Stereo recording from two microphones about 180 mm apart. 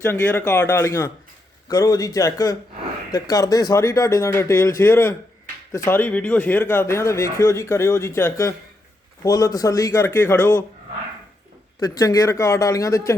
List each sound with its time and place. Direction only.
0.0 s a man's voice: 10° left (ahead or behind)
11.9 s speech: 20° left (ahead or behind)